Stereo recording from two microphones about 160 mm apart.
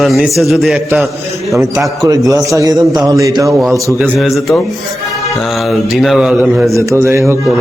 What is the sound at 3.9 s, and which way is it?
Speech, centre (ahead or behind).